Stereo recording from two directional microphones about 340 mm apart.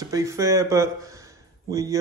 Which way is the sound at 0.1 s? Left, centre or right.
Centre.